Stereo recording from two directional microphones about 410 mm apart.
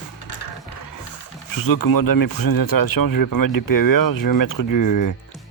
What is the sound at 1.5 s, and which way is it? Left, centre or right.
Speech, left.